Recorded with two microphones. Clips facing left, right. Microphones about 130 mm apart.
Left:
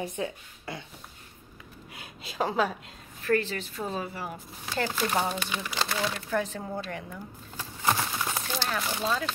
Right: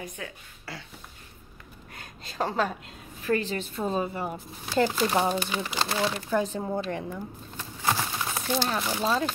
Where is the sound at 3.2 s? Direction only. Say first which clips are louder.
Even; 15° right (ahead or behind); by 5.6 s 40° right (ahead or behind).